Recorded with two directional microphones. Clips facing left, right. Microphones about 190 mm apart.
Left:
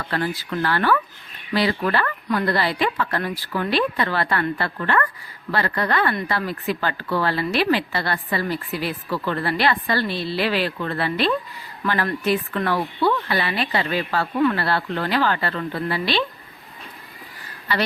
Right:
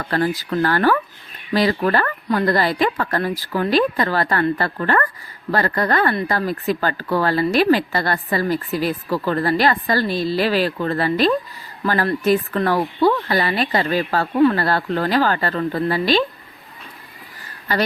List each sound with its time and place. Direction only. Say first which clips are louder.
0.0 s speech: right 5 dB; 40° right (ahead or behind)
17.7 s speech: right 3 dB; 45° right (ahead or behind)